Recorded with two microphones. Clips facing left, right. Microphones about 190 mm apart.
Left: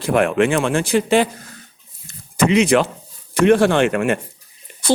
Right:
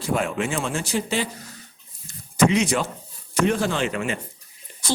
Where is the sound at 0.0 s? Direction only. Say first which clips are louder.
Left 8 dB; 70° left (ahead or behind).